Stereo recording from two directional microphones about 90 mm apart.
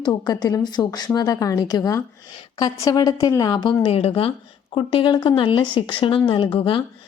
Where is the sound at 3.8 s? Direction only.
90° left.